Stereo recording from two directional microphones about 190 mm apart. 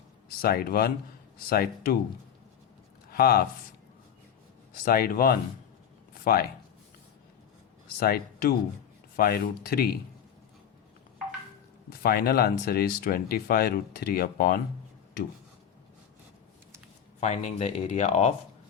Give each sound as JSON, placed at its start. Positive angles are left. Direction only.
{"t": 0.4, "sound": "speech", "side_deg": 50}
{"t": 3.1, "sound": "speech", "side_deg": 50}
{"t": 4.9, "sound": "speech", "side_deg": 50}
{"t": 7.9, "sound": "speech", "side_deg": 50}
{"t": 11.9, "sound": "speech", "side_deg": 55}
{"t": 17.2, "sound": "speech", "side_deg": 35}